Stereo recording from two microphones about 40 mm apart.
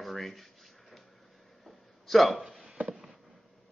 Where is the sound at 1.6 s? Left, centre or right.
Centre.